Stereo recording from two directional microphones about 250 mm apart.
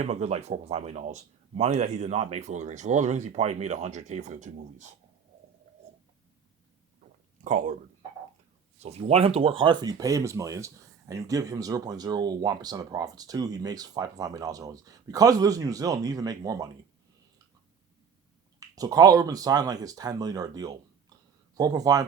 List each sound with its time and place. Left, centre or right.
0.0 s speech: right
7.4 s speech: right
8.8 s speech: right
18.8 s speech: centre